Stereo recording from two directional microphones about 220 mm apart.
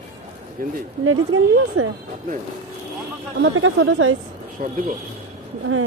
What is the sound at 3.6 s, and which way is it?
Speech, 65° right (ahead or behind).